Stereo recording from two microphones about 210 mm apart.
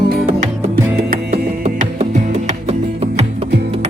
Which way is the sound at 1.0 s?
40° right (ahead or behind).